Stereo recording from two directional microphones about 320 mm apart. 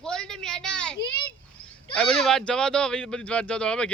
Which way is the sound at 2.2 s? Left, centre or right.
Centre.